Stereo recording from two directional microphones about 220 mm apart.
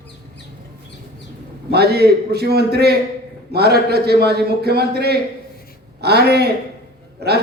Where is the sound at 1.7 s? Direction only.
45° right (ahead or behind).